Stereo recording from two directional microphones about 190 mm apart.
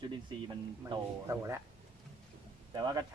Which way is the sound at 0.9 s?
15° right (ahead or behind).